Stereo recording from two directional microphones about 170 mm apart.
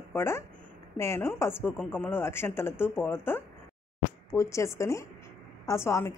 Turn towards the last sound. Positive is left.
turn(degrees=15)  # may be behind; listen again after turning